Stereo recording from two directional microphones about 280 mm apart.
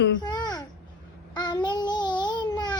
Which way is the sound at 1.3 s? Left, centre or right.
Centre.